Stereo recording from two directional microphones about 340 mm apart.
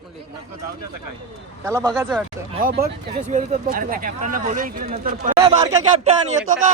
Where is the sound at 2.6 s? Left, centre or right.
Right.